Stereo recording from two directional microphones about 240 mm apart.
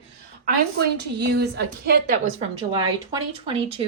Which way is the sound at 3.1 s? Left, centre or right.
Right.